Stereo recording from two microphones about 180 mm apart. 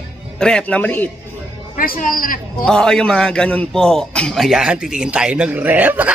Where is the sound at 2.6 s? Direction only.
5° left (ahead or behind).